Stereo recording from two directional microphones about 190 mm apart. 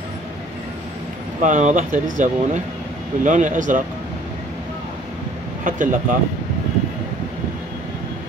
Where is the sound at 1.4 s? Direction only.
40° right (ahead or behind).